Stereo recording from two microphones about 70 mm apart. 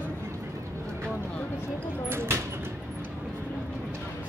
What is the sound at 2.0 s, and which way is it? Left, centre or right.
Speech, right.